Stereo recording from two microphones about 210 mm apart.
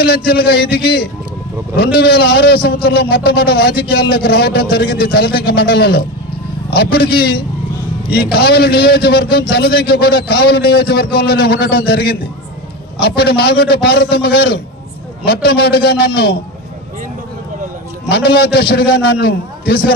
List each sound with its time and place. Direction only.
0.0 s a man's voice: 50° left (ahead or behind)
18.0 s a man's voice: 50° left (ahead or behind)